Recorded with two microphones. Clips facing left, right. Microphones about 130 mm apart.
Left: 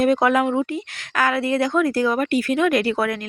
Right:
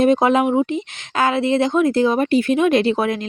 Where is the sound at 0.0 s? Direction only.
20° right (ahead or behind).